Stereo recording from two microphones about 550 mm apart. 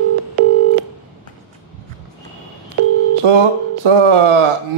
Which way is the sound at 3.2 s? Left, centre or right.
Right.